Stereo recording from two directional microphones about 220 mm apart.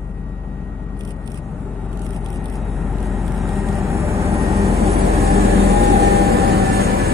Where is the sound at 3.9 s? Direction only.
15° right (ahead or behind).